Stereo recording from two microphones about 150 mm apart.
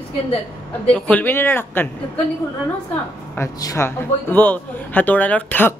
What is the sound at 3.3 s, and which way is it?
Speech, 20° left (ahead or behind).